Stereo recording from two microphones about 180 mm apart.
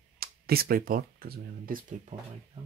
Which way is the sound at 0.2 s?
55° right (ahead or behind).